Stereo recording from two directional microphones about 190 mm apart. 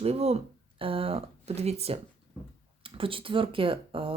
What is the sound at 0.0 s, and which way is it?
Speech, 35° right (ahead or behind).